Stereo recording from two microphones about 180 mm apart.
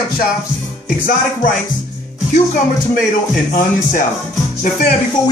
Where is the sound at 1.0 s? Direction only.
50° left (ahead or behind).